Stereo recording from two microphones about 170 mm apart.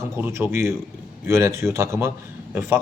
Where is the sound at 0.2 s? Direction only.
15° right (ahead or behind).